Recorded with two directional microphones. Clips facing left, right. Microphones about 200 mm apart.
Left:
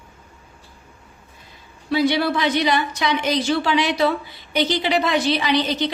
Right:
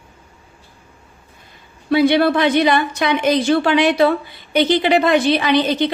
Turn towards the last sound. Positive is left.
turn(degrees=-55)  # may be behind; listen again after turning